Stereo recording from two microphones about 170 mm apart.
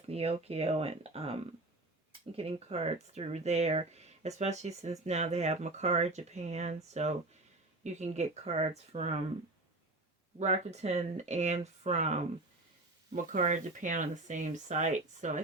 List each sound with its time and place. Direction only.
0.0 s speech: 35° right (ahead or behind)
10.3 s speech: 40° right (ahead or behind)